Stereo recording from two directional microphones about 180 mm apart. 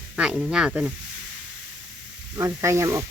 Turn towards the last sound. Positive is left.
turn(degrees=-15)  # may be behind; listen again after turning